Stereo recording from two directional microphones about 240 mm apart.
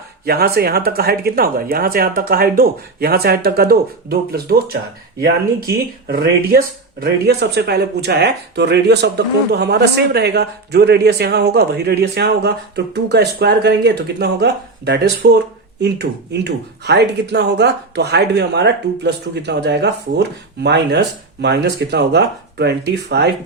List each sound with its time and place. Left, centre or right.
0.3 s speech: right
6.1 s speech: right